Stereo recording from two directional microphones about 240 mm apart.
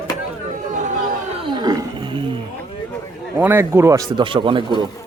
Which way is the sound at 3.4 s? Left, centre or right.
Centre.